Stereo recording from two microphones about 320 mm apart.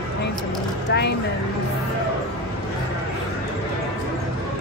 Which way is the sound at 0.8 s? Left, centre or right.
Left.